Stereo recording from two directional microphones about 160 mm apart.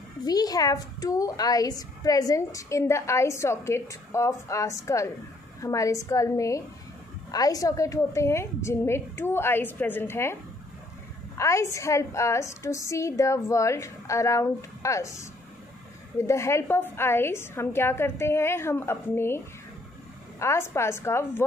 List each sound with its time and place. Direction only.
0.2 s a woman's voice: 25° left (ahead or behind)
11.3 s a woman's voice: 20° left (ahead or behind)